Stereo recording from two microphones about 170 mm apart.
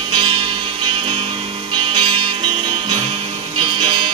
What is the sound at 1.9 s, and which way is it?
Music, 30° right (ahead or behind).